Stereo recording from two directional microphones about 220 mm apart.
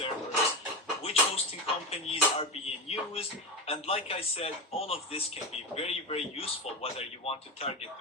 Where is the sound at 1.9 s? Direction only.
25° left (ahead or behind).